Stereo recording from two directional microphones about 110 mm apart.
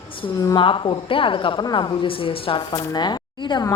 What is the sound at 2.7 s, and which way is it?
Speech, 40° left (ahead or behind).